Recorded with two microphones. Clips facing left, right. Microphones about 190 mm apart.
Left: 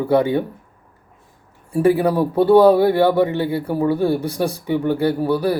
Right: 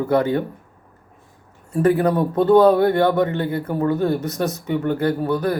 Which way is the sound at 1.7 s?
10° left (ahead or behind).